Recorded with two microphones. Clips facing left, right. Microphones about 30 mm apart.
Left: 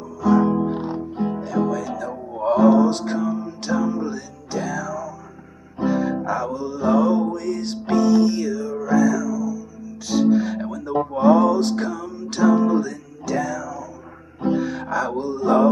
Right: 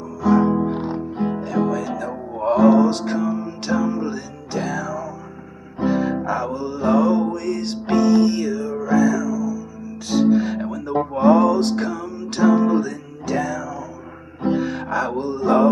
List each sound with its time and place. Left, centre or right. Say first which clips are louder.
0.2 s music: right 1 dB; centre